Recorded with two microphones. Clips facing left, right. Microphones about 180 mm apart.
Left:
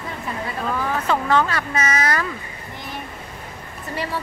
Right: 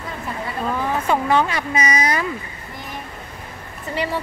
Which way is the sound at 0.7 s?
15° right (ahead or behind).